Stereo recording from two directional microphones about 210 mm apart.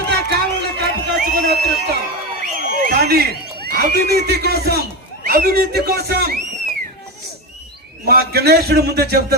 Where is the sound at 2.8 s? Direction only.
50° right (ahead or behind).